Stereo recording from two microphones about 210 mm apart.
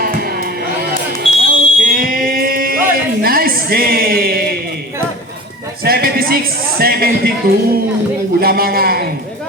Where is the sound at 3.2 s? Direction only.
45° right (ahead or behind).